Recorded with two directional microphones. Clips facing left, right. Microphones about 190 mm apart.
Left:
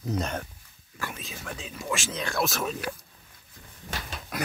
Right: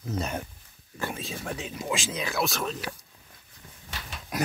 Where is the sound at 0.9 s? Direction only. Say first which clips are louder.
Right 4 dB; 25° right (ahead or behind).